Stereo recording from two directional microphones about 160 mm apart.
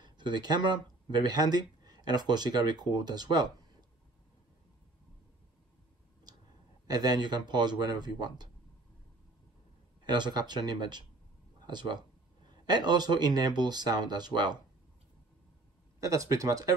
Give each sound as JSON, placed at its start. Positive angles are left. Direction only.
{"t": 0.0, "sound": "speech", "side_deg": -25}
{"t": 6.9, "sound": "speech", "side_deg": -25}
{"t": 10.0, "sound": "speech", "side_deg": -25}
{"t": 16.0, "sound": "speech", "side_deg": -20}